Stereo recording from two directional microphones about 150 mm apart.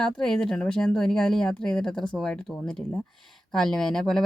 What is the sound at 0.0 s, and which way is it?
Speech, 5° left (ahead or behind).